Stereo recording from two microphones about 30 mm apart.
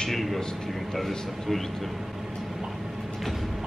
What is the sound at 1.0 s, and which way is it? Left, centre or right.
Speech, centre.